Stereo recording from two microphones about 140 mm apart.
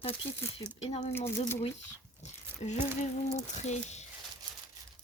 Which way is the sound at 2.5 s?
15° right (ahead or behind).